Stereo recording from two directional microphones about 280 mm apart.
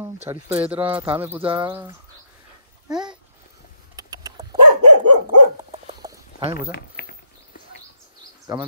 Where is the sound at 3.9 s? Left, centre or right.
Centre.